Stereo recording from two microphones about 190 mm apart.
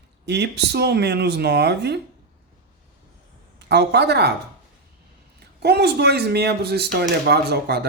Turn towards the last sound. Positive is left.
turn(degrees=-60)  # may be behind; listen again after turning